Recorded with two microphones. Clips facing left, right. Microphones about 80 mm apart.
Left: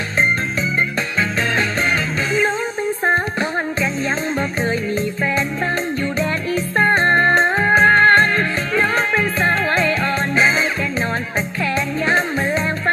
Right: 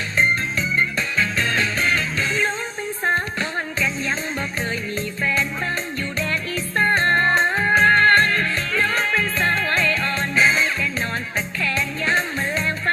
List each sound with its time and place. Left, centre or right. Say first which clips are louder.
4.7 s music: left 6 dB; centre